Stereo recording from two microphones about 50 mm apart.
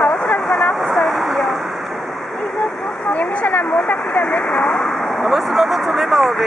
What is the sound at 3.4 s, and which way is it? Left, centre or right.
Speech, left.